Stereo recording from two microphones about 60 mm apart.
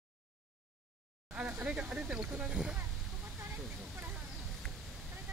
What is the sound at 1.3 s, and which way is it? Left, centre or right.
Speech, right.